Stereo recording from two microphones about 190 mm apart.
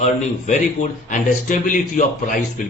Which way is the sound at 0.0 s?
40° left (ahead or behind).